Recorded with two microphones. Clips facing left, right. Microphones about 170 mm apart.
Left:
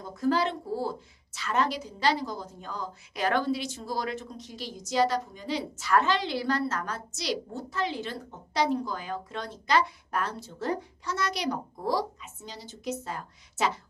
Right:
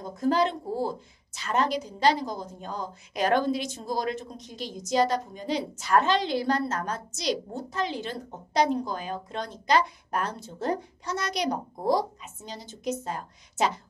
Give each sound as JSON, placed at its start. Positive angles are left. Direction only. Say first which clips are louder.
{"t": 0.1, "sound": "a woman's voice", "louder": "right 2 dB", "side_deg": -20}
{"t": 13.0, "sound": "a woman's voice", "louder": "right 3 dB", "side_deg": -20}